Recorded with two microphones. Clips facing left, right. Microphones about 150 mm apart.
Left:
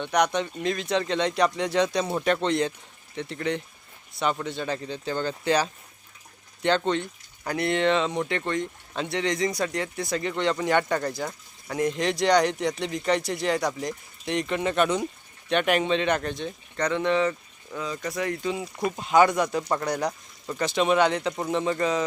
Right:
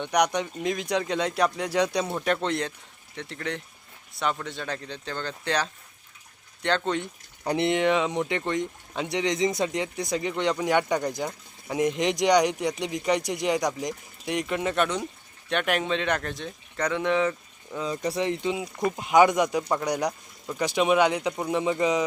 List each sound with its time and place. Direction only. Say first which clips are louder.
0.0 s speech: even; 15° right (ahead or behind)
2.0 s speech: left 2 dB; centre (ahead or behind)
7.0 s speech: right 2 dB; 20° right (ahead or behind)
17.8 s speech: right 3 dB; 25° right (ahead or behind)